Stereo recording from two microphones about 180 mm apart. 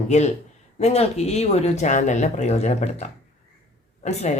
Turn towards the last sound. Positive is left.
turn(degrees=40)  # may be behind; listen again after turning